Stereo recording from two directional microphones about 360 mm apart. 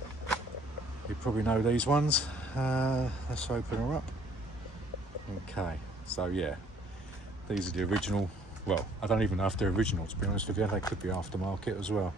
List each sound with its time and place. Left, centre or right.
1.2 s speech: centre
5.5 s speech: centre
7.5 s speech: centre